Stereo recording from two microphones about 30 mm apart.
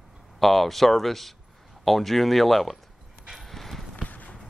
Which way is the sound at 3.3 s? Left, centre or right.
Centre.